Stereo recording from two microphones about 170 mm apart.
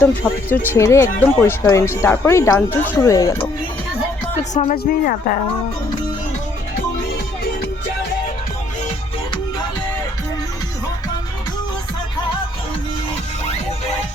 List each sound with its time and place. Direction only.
0.0 s speech: 10° left (ahead or behind)
4.4 s speech: 40° left (ahead or behind)
4.7 s speech: 60° left (ahead or behind)